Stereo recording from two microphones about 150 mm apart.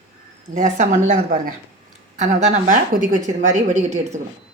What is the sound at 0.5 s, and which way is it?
Speech, 55° right (ahead or behind).